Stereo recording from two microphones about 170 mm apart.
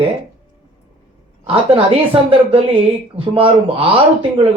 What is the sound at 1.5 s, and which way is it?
Speech, 35° right (ahead or behind).